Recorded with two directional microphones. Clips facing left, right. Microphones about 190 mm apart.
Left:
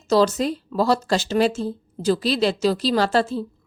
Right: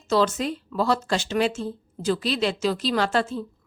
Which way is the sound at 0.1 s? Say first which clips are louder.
Left 4 dB; 40° left (ahead or behind).